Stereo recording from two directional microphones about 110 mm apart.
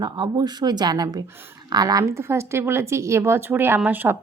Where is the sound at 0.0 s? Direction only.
45° right (ahead or behind).